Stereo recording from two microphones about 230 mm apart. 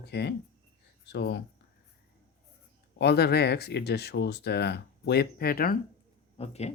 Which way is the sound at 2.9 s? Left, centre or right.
Left.